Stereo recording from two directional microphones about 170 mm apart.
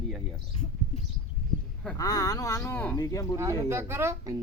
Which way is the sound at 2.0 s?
20° left (ahead or behind).